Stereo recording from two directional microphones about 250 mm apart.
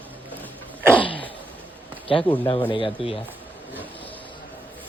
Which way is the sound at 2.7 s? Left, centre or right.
Centre.